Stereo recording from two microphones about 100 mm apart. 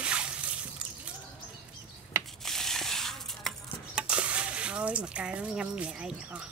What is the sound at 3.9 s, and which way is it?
Speech, 10° right (ahead or behind).